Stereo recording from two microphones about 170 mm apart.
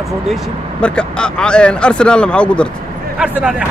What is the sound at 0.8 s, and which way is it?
A man's voice, 5° left (ahead or behind).